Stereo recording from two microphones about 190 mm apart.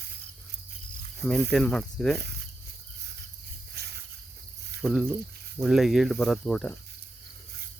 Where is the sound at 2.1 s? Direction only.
60° right (ahead or behind).